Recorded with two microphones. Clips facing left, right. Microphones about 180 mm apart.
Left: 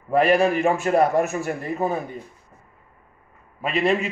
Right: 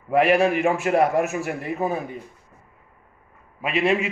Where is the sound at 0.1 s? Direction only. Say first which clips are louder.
Even; 10° right (ahead or behind).